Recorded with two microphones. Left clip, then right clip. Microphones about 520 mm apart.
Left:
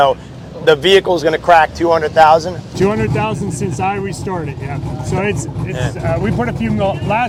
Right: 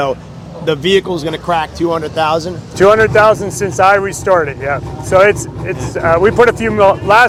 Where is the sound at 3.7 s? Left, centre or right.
Right.